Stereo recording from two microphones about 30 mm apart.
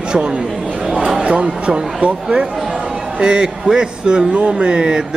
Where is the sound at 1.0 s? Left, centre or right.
Right.